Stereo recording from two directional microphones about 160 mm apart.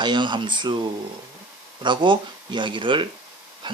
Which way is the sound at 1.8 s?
30° right (ahead or behind).